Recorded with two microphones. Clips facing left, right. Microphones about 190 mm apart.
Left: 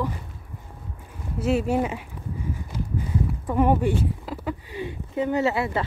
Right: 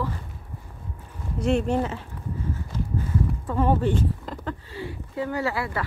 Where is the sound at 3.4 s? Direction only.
15° left (ahead or behind).